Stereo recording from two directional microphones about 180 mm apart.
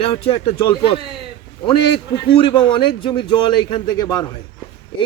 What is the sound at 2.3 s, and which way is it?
A man's voice, 25° left (ahead or behind).